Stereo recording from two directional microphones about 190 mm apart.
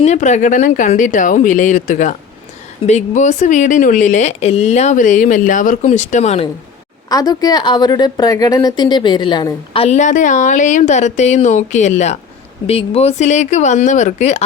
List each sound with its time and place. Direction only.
0.0 s speech: 35° left (ahead or behind)
7.1 s a woman's voice: 20° left (ahead or behind)
9.8 s speech: 40° left (ahead or behind)